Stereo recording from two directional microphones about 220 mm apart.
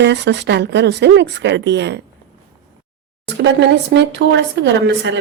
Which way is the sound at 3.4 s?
55° right (ahead or behind).